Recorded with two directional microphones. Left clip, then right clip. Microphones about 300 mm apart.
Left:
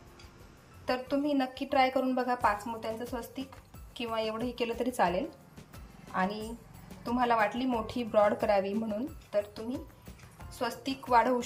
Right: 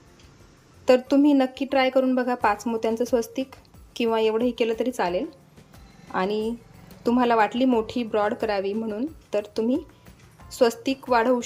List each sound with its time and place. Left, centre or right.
0.9 s a woman's voice: centre